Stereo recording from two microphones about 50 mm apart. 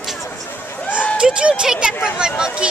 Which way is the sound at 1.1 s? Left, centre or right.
Centre.